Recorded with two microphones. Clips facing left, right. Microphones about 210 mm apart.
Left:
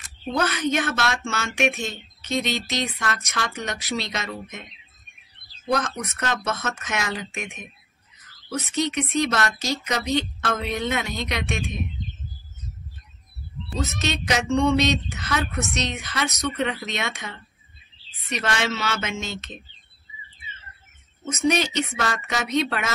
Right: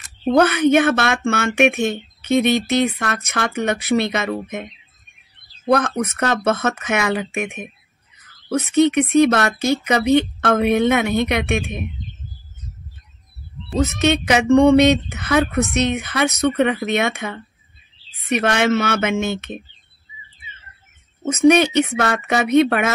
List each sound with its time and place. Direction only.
0.2 s speech: 60° right (ahead or behind)
5.7 s speech: 60° right (ahead or behind)
13.9 s speech: 60° right (ahead or behind)
21.2 s speech: 60° right (ahead or behind)